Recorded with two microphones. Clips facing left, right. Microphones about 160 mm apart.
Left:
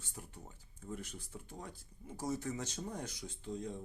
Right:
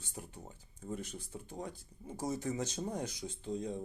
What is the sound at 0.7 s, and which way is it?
Speech, 30° right (ahead or behind).